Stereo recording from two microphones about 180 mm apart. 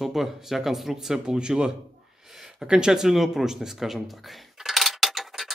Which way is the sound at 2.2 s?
Centre (ahead or behind).